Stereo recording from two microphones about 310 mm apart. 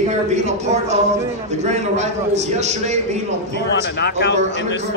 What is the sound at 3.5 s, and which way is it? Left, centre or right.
A man's voice, left.